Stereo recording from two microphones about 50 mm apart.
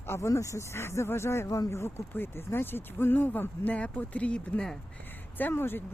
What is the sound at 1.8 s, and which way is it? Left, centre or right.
Speech, left.